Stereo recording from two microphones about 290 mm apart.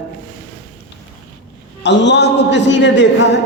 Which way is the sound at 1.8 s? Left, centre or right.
Left.